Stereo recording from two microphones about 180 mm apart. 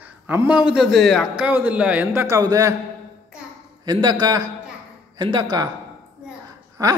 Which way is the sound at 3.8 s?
25° right (ahead or behind).